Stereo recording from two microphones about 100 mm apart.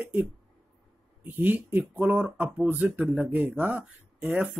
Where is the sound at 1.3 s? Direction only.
20° right (ahead or behind).